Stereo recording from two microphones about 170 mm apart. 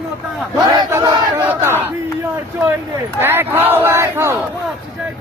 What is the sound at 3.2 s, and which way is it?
Speech, 15° right (ahead or behind).